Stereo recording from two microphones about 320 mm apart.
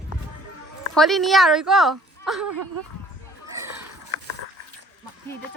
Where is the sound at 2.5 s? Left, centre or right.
Right.